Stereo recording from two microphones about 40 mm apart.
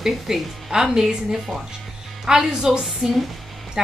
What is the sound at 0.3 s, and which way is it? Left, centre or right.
A woman's voice, centre.